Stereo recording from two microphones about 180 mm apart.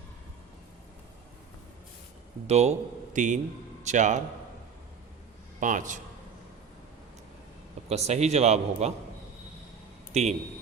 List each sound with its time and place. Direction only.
2.5 s a man's voice: 40° right (ahead or behind)
5.5 s a man's voice: 45° right (ahead or behind)
7.9 s a man's voice: 35° right (ahead or behind)
10.1 s a man's voice: 35° right (ahead or behind)